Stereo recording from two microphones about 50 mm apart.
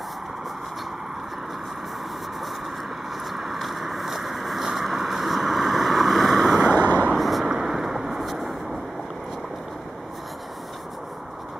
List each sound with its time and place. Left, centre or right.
3.3 s vehicle: centre
6.7 s vehicle: left
7.1 s vehicle: centre